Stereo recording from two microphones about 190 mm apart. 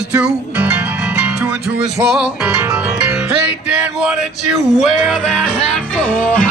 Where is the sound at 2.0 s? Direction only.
5° right (ahead or behind).